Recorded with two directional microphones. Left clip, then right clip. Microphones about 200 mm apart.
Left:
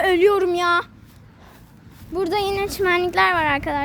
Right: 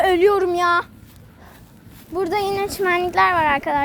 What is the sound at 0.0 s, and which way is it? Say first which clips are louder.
Speech: right 1 dB; 15° left (ahead or behind).